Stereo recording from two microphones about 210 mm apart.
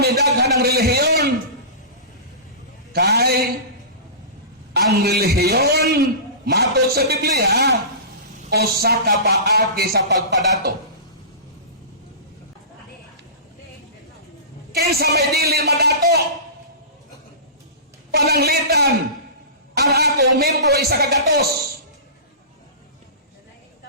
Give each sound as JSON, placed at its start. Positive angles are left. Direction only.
{"t": 0.0, "sound": "a man's voice", "side_deg": -50}
{"t": 2.9, "sound": "a man's voice", "side_deg": -50}
{"t": 4.7, "sound": "a man's voice", "side_deg": -50}
{"t": 14.7, "sound": "a man's voice", "side_deg": -50}
{"t": 18.1, "sound": "a man's voice", "side_deg": -50}